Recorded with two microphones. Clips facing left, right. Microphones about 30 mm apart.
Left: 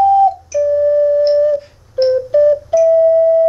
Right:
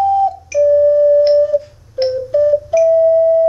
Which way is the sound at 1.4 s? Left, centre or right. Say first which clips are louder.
Even; centre.